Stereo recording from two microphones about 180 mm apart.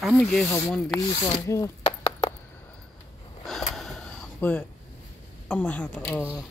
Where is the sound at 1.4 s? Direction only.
15° left (ahead or behind).